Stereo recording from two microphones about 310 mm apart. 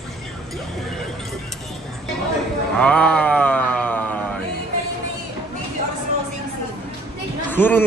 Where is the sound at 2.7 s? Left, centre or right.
Centre.